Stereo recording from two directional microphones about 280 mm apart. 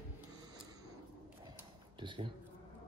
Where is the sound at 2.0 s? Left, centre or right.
Centre.